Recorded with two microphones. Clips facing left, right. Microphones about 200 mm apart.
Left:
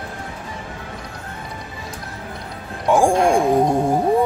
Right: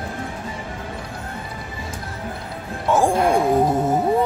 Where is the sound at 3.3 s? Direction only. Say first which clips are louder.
Left 1 dB; 5° right (ahead or behind).